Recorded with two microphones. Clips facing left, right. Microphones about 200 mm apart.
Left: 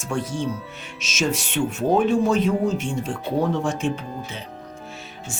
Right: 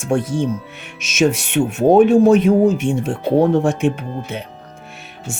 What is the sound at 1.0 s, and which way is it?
Speech, 55° right (ahead or behind).